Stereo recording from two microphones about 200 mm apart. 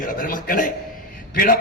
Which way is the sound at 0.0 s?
45° left (ahead or behind).